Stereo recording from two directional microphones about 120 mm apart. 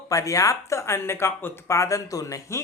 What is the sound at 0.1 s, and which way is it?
Speech, 30° left (ahead or behind).